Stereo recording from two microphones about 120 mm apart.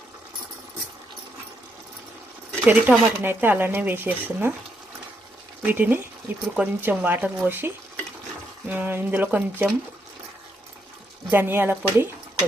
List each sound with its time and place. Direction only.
2.6 s speech: 15° right (ahead or behind)
5.6 s speech: 15° right (ahead or behind)
11.3 s speech: 15° right (ahead or behind)